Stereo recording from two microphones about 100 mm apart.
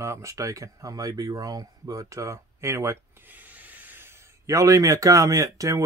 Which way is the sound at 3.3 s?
15° right (ahead or behind).